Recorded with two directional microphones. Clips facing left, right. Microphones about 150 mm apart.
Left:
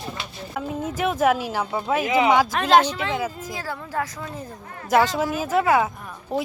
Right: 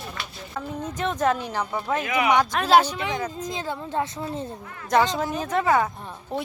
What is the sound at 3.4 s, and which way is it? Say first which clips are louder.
Speech: right 2 dB; 20° right (ahead or behind).